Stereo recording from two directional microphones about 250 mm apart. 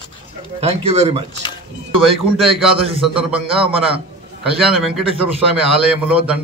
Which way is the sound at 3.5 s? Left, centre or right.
Right.